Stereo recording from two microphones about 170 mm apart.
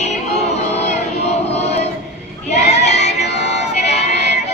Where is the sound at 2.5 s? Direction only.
40° left (ahead or behind).